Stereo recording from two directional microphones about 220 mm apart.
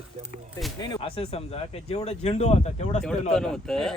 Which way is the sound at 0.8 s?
20° left (ahead or behind).